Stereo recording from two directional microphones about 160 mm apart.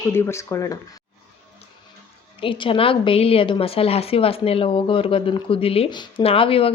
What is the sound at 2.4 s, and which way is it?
A woman's voice, 35° left (ahead or behind).